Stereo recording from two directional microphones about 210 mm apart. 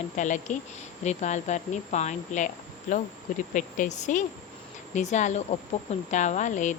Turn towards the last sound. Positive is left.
turn(degrees=35)  # may be behind; listen again after turning